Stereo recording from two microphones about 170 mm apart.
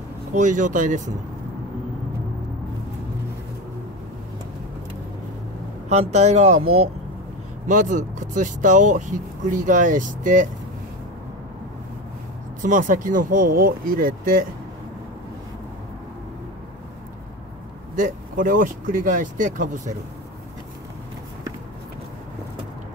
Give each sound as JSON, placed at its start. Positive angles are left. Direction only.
{"t": 0.3, "sound": "speech", "side_deg": -45}
{"t": 5.9, "sound": "speech", "side_deg": -40}
{"t": 12.6, "sound": "speech", "side_deg": -50}
{"t": 17.9, "sound": "speech", "side_deg": -50}